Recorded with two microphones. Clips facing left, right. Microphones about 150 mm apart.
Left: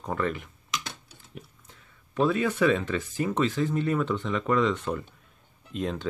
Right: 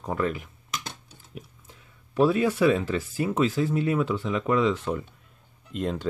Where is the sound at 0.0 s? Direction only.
5° right (ahead or behind).